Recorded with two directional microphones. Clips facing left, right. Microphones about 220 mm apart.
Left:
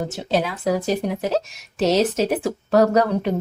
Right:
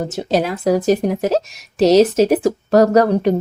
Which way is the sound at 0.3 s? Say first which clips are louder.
Right 5 dB; 40° right (ahead or behind).